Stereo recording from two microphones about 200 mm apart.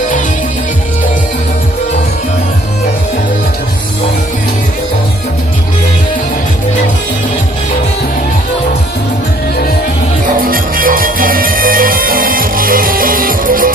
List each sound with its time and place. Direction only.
10.5 s music: 45° right (ahead or behind)